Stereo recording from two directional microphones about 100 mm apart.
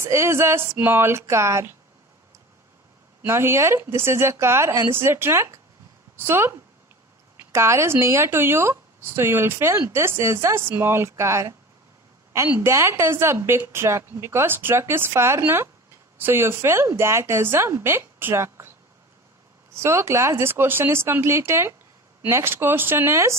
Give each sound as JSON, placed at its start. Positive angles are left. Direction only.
{"t": 0.0, "sound": "a woman's voice", "side_deg": -25}
{"t": 3.2, "sound": "a woman's voice", "side_deg": -25}
{"t": 19.7, "sound": "a woman's voice", "side_deg": -25}